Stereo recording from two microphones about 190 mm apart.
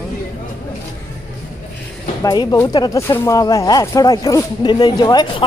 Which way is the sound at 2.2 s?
20° left (ahead or behind).